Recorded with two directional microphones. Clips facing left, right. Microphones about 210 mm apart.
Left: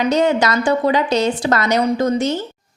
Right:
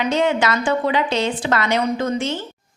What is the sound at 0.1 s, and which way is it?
A woman's voice, 40° left (ahead or behind).